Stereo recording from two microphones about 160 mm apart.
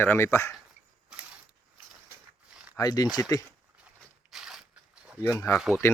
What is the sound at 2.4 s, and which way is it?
Zipper, 10° right (ahead or behind).